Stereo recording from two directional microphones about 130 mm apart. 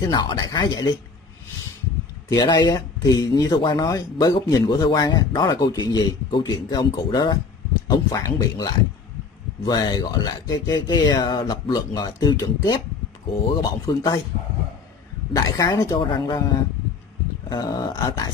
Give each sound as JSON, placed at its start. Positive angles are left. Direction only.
{"t": 0.1, "sound": "speech", "side_deg": 30}
{"t": 2.2, "sound": "speech", "side_deg": 30}
{"t": 15.3, "sound": "speech", "side_deg": 25}